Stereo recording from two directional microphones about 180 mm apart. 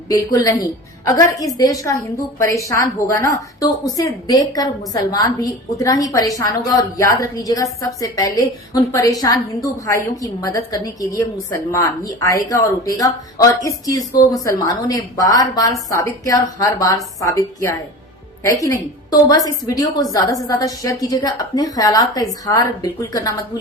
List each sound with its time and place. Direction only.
0.1 s a woman's voice: 20° left (ahead or behind)